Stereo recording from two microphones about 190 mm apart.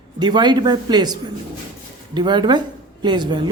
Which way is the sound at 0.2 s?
25° right (ahead or behind).